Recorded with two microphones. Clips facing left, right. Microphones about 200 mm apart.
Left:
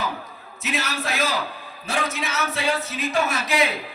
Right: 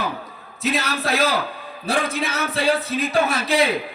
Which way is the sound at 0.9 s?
35° right (ahead or behind).